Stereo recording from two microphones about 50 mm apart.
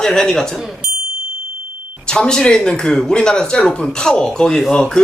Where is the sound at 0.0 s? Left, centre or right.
Centre.